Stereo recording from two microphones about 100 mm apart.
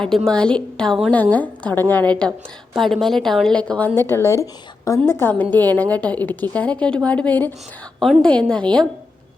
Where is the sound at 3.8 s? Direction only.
20° left (ahead or behind).